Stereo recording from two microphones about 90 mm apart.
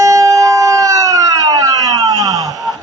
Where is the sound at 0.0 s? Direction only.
40° right (ahead or behind).